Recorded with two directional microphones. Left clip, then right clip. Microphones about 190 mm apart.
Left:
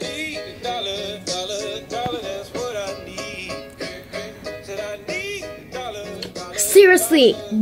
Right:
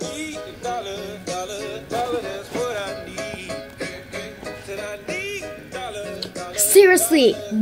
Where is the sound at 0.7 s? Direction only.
30° right (ahead or behind).